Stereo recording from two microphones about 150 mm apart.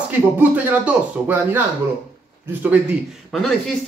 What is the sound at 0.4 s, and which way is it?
Speech, 10° right (ahead or behind).